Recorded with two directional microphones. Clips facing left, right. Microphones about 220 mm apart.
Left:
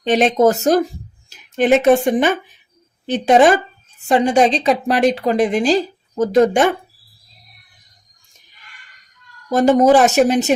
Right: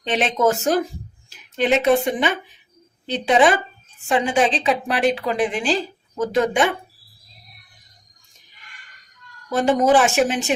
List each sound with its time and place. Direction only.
0.0 s a woman's voice: 40° left (ahead or behind)
9.5 s a woman's voice: 40° left (ahead or behind)